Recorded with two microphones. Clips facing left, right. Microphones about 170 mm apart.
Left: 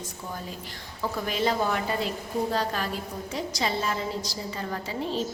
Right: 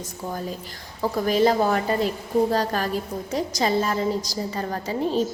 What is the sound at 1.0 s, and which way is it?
A woman's voice, 40° right (ahead or behind).